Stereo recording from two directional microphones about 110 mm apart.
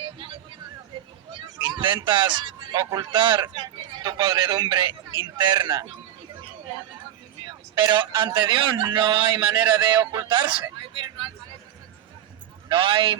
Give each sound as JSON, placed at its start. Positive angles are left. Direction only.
{"t": 1.5, "sound": "a sound", "side_deg": -40}
{"t": 2.0, "sound": "a man's voice", "side_deg": -45}
{"t": 7.8, "sound": "a man's voice", "side_deg": -45}
{"t": 12.6, "sound": "a man's voice", "side_deg": -50}